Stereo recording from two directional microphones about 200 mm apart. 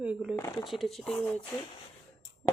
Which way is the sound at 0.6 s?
Centre (ahead or behind).